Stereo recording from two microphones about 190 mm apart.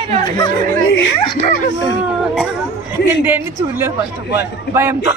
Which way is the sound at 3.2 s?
10° right (ahead or behind).